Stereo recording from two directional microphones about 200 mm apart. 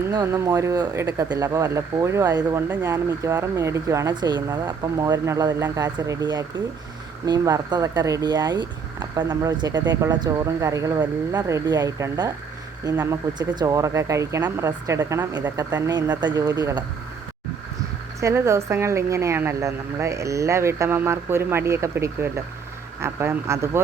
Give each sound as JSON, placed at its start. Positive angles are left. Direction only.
{"t": 0.1, "sound": "speech", "side_deg": -15}
{"t": 18.2, "sound": "speech", "side_deg": -15}